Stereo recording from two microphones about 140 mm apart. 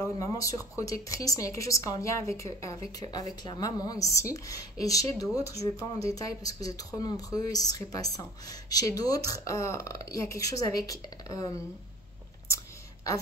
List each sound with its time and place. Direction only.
0.0 s speech: 25° left (ahead or behind)